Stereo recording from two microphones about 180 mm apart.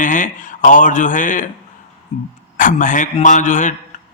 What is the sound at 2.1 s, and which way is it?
Throat clearing, 40° left (ahead or behind).